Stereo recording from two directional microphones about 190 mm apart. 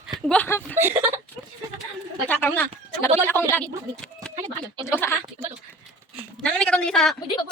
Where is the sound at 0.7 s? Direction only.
10° right (ahead or behind).